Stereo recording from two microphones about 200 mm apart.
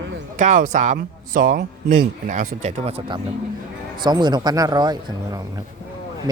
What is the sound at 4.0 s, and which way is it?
Speech, 20° right (ahead or behind).